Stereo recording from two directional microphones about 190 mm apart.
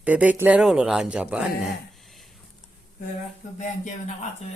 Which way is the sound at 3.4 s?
40° left (ahead or behind).